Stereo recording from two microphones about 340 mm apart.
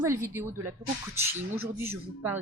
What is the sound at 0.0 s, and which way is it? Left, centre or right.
Speech, centre.